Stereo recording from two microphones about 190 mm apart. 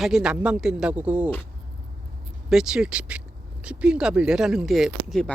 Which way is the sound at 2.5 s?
5° right (ahead or behind).